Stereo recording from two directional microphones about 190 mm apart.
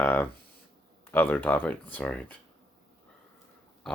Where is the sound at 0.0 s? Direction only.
10° left (ahead or behind).